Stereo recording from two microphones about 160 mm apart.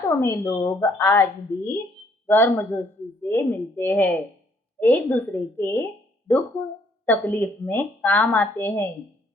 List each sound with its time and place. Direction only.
0.2 s a woman's voice: 20° left (ahead or behind)